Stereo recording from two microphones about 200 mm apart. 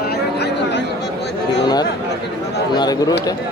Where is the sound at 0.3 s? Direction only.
55° left (ahead or behind).